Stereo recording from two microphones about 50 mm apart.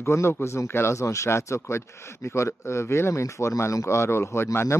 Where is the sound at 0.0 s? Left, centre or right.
Left.